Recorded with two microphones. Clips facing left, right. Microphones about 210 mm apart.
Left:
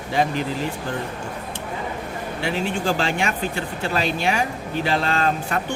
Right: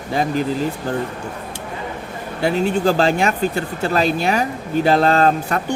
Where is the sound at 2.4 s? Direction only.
40° right (ahead or behind).